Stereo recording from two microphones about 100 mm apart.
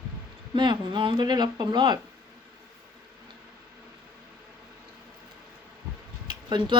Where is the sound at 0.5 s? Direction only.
50° right (ahead or behind).